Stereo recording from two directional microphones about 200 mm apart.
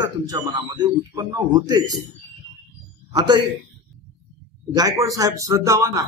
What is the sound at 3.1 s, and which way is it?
Speech, 20° right (ahead or behind).